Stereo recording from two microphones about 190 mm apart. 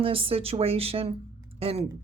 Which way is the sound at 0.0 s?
30° right (ahead or behind).